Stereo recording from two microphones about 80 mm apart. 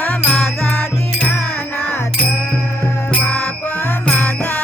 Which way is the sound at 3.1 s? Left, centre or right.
Left.